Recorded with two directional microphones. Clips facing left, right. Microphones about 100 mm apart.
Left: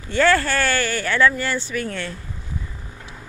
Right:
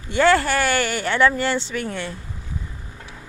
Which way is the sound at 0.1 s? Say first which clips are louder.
Right 1 dB; 20° right (ahead or behind).